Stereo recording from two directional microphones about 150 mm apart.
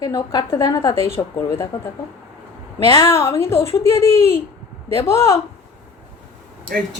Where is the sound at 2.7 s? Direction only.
20° left (ahead or behind).